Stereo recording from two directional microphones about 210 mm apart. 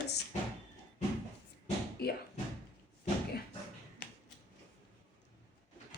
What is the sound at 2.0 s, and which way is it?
Speech, 50° left (ahead or behind).